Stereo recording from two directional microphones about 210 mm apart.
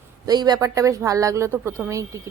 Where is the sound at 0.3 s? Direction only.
20° right (ahead or behind).